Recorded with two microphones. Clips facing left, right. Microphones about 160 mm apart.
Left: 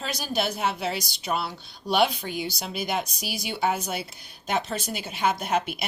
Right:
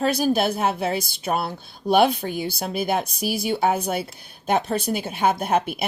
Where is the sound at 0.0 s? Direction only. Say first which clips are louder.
Right 8 dB; 55° right (ahead or behind).